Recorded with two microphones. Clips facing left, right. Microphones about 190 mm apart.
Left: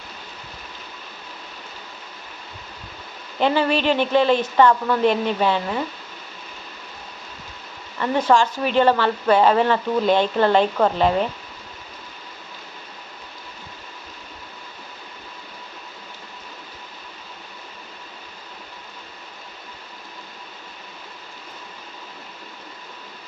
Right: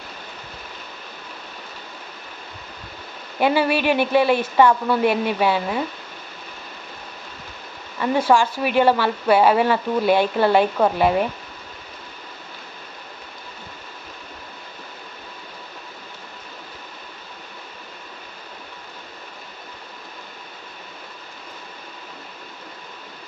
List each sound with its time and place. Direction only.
3.4 s speech: 10° right (ahead or behind)
7.9 s speech: 10° right (ahead or behind)